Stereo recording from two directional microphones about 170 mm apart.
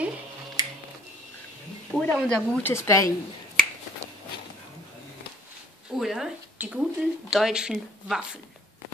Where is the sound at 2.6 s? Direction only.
15° left (ahead or behind).